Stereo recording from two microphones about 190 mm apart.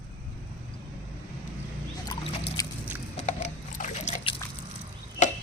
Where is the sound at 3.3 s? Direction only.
40° left (ahead or behind).